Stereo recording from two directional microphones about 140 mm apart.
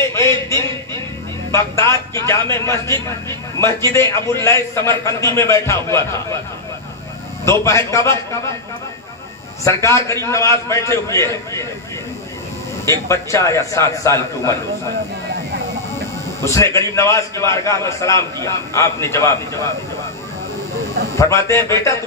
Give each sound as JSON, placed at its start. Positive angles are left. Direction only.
{"t": 0.0, "sound": "a sound", "side_deg": 20}
{"t": 1.5, "sound": "a man's voice", "side_deg": 20}
{"t": 7.4, "sound": "a man's voice", "side_deg": 20}
{"t": 9.7, "sound": "a man's voice", "side_deg": 20}
{"t": 12.8, "sound": "a man's voice", "side_deg": 20}
{"t": 16.3, "sound": "a man's voice", "side_deg": 20}
{"t": 21.2, "sound": "a man's voice", "side_deg": 20}